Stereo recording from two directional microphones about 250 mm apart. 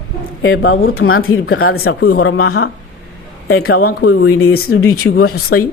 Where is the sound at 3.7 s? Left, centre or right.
Left.